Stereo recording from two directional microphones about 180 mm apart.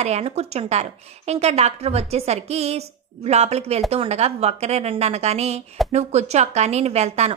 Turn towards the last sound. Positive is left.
turn(degrees=-35)  # may be behind; listen again after turning